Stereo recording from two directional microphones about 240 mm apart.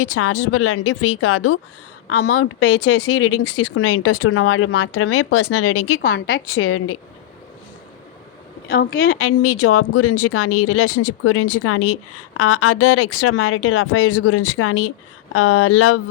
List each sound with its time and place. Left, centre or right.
0.0 s speech: left
8.7 s a woman's voice: left
9.0 s speech: left